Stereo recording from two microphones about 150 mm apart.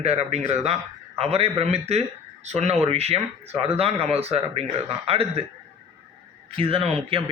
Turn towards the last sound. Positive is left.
turn(degrees=-40)  # may be behind; listen again after turning